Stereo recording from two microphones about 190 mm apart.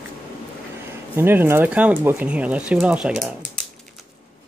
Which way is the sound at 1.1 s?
10° right (ahead or behind).